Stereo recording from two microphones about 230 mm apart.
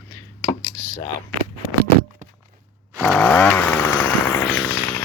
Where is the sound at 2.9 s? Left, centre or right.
Centre.